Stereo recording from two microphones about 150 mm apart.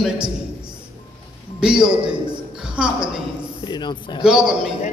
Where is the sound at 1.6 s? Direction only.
5° right (ahead or behind).